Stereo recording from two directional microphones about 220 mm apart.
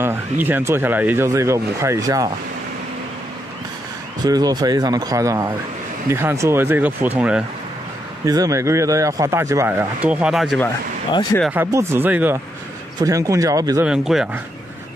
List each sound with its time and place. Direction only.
0.0 s speech: 10° right (ahead or behind)
4.2 s speech: 15° right (ahead or behind); by 10.7 s centre (ahead or behind)
11.5 s speech: 10° right (ahead or behind)
13.8 s a man's voice: centre (ahead or behind)